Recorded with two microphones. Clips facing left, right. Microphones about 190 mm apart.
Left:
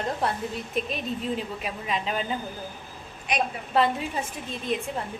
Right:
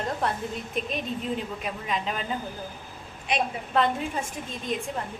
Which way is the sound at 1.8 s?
Centre (ahead or behind).